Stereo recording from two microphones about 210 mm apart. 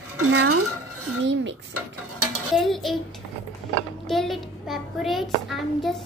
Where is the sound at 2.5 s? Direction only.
Centre (ahead or behind).